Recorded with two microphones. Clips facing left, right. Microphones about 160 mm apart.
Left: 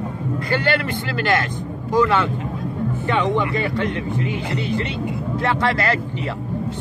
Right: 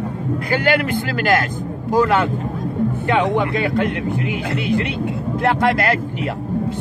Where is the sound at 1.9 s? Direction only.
45° right (ahead or behind).